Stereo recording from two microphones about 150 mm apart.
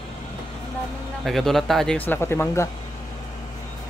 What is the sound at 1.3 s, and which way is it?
Speech, centre (ahead or behind).